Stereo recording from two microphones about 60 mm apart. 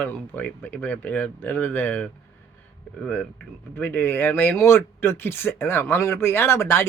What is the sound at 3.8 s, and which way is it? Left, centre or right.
Speech, left.